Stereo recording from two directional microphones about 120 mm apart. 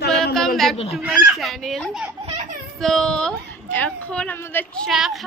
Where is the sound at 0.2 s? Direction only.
5° left (ahead or behind).